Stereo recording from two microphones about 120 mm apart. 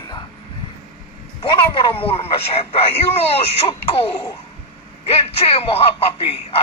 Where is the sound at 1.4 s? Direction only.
45° left (ahead or behind).